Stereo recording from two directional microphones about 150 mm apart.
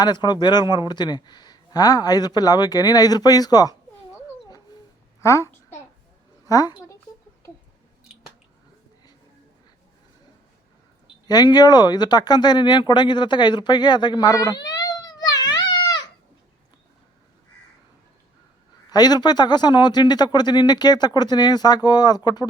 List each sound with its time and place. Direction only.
0.0 s a child's voice: 30° left (ahead or behind)
11.3 s a man's voice: 25° left (ahead or behind)
18.9 s a man's voice: 25° left (ahead or behind)